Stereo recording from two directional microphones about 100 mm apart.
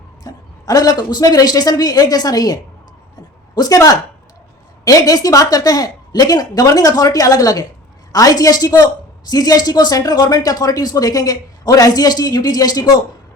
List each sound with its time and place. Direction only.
0.3 s a woman's voice: 40° left (ahead or behind)